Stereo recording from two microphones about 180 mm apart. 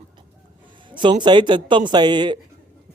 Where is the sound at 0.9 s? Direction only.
25° right (ahead or behind).